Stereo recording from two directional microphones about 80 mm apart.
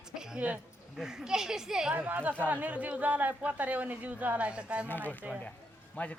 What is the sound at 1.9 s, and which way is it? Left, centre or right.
Speech, right.